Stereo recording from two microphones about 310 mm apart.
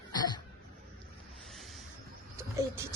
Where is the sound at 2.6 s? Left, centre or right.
Centre.